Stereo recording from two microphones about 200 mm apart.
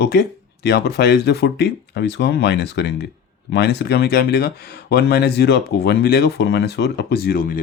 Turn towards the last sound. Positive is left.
turn(degrees=45)  # may be behind; listen again after turning